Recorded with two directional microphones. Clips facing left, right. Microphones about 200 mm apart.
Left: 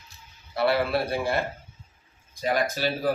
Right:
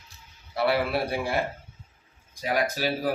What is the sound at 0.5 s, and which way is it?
Speech, 10° right (ahead or behind).